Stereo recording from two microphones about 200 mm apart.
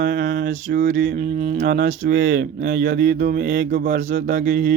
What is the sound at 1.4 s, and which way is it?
Speech, 40° right (ahead or behind).